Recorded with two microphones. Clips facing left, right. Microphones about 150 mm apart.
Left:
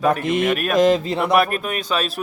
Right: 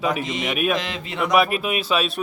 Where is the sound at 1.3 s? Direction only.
Centre (ahead or behind).